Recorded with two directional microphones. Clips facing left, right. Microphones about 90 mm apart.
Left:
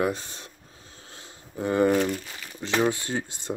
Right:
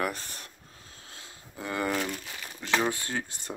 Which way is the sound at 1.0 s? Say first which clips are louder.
Left 2 dB; 30° left (ahead or behind).